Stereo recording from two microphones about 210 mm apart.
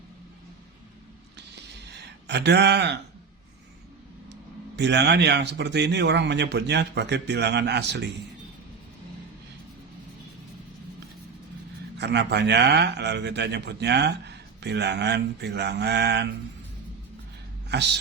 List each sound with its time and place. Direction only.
1.9 s speech: 55° right (ahead or behind)
4.8 s a man's voice: 55° right (ahead or behind)
11.9 s a man's voice: 55° right (ahead or behind)